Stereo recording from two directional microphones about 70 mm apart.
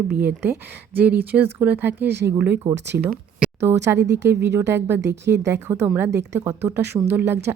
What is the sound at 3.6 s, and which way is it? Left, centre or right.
A woman's voice, right.